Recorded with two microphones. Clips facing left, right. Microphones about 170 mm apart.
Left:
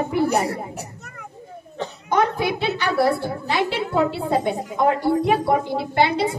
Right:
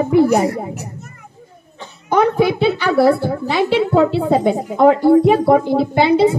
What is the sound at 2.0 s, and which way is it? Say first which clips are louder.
A woman's voice: right 7 dB; 65° right (ahead or behind).